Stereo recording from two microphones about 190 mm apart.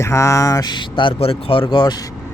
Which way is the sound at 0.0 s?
15° left (ahead or behind).